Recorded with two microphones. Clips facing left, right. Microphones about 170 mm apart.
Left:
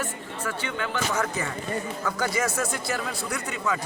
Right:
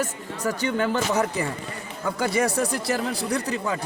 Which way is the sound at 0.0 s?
40° right (ahead or behind).